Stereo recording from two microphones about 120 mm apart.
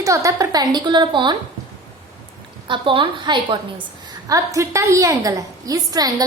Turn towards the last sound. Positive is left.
turn(degrees=-30)  # may be behind; listen again after turning